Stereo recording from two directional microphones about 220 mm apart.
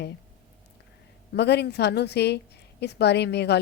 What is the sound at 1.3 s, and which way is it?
Speech, 50° left (ahead or behind).